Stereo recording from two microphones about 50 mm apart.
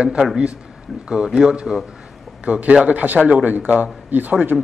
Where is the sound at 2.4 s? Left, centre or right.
Right.